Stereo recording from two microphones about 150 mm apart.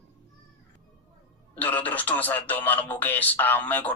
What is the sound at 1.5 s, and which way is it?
Speech, 10° left (ahead or behind).